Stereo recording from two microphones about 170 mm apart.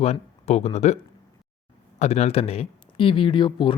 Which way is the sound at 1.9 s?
40° left (ahead or behind).